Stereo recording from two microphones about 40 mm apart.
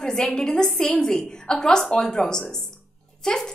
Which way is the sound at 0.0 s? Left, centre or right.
Centre.